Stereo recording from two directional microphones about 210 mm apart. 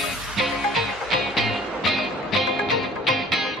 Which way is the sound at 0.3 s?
Centre (ahead or behind).